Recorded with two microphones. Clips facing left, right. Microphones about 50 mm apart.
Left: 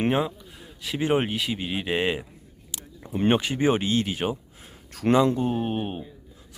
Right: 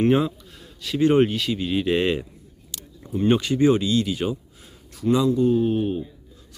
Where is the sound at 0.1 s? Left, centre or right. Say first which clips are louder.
Right 4 dB; centre.